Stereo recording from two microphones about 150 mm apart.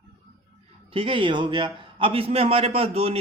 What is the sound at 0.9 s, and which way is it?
A man's voice, 35° right (ahead or behind).